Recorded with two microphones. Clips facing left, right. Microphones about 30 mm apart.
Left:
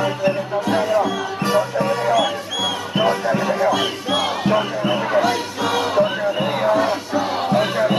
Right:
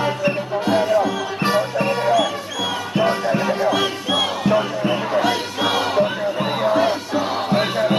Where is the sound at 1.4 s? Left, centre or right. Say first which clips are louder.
Even; right.